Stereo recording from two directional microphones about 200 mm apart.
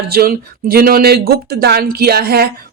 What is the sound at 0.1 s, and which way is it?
A woman's voice, 50° right (ahead or behind).